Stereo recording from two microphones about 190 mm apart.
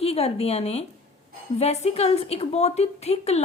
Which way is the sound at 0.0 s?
30° left (ahead or behind).